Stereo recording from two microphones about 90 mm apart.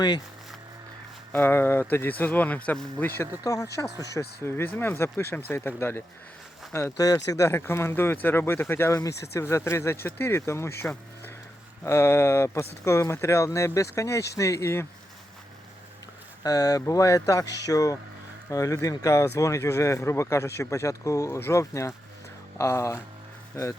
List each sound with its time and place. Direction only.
1.3 s speech: 25° left (ahead or behind)
3.4 s speech: 40° left (ahead or behind)
6.9 s speech: 40° left (ahead or behind); by 8.9 s 25° left (ahead or behind)
8.9 s speech: 40° left (ahead or behind)
16.4 s speech: 40° left (ahead or behind)